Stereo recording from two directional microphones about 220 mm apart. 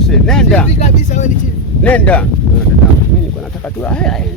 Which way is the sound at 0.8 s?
35° left (ahead or behind).